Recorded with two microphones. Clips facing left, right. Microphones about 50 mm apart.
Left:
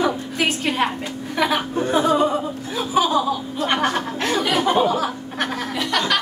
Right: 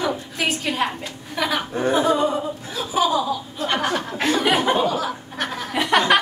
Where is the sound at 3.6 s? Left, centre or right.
Left.